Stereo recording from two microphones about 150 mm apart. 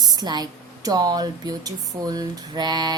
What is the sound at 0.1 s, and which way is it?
Speech, 25° right (ahead or behind).